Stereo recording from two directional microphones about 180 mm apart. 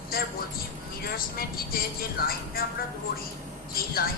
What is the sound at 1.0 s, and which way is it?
Music, 55° left (ahead or behind).